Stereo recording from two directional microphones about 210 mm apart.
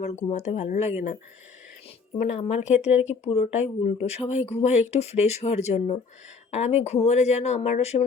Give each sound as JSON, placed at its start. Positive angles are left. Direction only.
{"t": 0.0, "sound": "speech", "side_deg": 30}
{"t": 2.1, "sound": "speech", "side_deg": 35}